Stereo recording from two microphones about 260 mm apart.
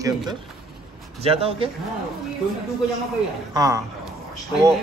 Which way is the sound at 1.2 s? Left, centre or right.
Right.